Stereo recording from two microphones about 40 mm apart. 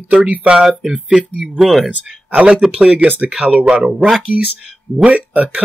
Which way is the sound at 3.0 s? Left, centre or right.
Right.